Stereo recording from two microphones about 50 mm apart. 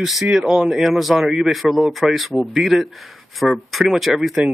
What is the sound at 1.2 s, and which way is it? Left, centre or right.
Speech, centre.